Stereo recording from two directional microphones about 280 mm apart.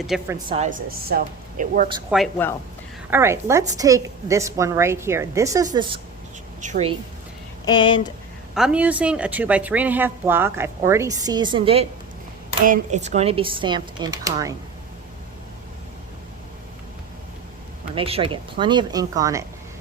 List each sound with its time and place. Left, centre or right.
0.1 s a woman's voice: centre
0.4 s a woman's voice: right
2.0 s a woman's voice: centre
3.1 s a woman's voice: centre; by 6.9 s right
7.6 s speech: centre
8.5 s speech: centre
17.9 s speech: centre